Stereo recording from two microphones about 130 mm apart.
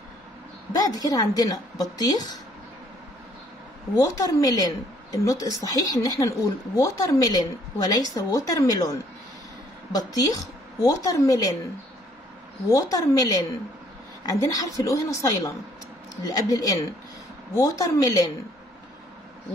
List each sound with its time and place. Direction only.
0.7 s speech: 30° left (ahead or behind)
3.9 s speech: 25° left (ahead or behind)
9.9 s speech: 30° left (ahead or behind)
12.6 s speech: 25° left (ahead or behind)